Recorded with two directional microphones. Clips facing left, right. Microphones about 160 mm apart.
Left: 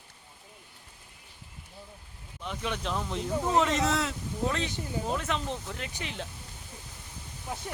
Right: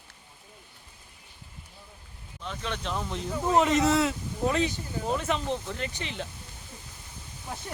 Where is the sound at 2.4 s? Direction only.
10° left (ahead or behind).